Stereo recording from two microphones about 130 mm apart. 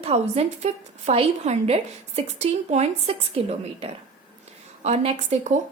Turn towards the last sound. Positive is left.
turn(degrees=-55)  # may be behind; listen again after turning